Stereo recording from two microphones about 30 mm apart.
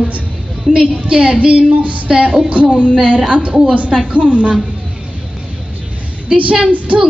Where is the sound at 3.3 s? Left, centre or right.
Right.